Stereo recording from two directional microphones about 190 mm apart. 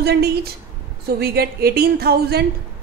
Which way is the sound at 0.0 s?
55° right (ahead or behind).